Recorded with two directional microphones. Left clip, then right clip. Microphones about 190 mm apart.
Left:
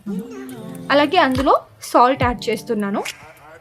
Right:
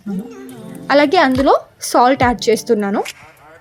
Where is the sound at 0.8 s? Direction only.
25° right (ahead or behind).